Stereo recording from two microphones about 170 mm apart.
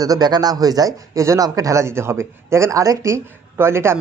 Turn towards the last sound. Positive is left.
turn(degrees=-15)  # may be behind; listen again after turning